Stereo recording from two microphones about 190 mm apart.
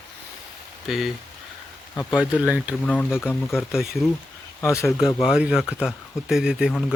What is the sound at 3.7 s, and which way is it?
Speech, centre (ahead or behind).